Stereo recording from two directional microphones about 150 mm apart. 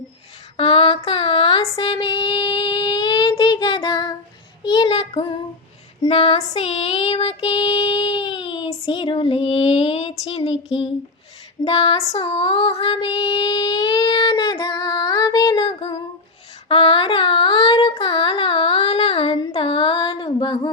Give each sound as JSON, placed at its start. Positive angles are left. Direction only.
{"t": 0.5, "sound": "female singing", "side_deg": 40}
{"t": 1.7, "sound": "child singing", "side_deg": 35}
{"t": 6.1, "sound": "a sound", "side_deg": 40}
{"t": 6.5, "sound": "child singing", "side_deg": 45}
{"t": 11.6, "sound": "child singing", "side_deg": 35}
{"t": 16.6, "sound": "a sound", "side_deg": 35}